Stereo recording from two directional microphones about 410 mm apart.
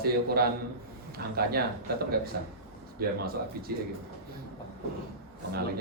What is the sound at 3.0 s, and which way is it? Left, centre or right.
Speech, right.